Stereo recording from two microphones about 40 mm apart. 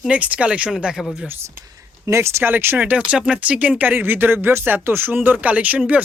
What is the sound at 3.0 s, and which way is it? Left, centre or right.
Speech, right.